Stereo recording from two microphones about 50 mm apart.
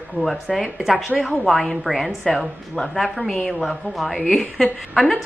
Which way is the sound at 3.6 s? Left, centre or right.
Centre.